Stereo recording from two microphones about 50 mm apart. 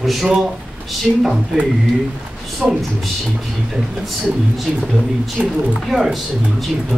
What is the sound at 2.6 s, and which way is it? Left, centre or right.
Speech, centre.